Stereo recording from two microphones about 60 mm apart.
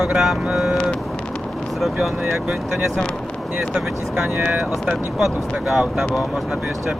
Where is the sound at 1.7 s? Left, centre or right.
Centre.